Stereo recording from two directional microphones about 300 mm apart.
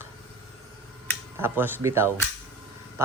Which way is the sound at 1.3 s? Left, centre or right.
Centre.